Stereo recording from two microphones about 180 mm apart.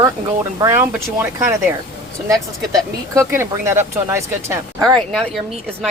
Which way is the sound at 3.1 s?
15° right (ahead or behind).